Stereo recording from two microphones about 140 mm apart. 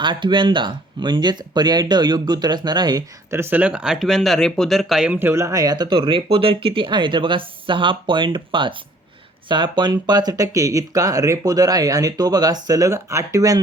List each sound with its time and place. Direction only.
0.0 s speech: 35° right (ahead or behind)